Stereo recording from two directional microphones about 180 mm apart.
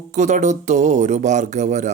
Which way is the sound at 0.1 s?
40° right (ahead or behind).